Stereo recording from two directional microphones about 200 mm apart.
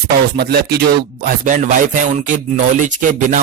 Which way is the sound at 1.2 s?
45° right (ahead or behind).